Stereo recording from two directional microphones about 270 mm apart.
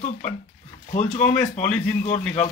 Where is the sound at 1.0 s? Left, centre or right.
Left.